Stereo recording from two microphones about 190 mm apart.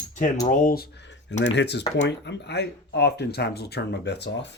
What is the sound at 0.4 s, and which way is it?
Speech, 45° left (ahead or behind).